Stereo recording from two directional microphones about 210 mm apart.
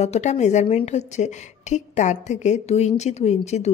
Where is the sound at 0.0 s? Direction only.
30° left (ahead or behind).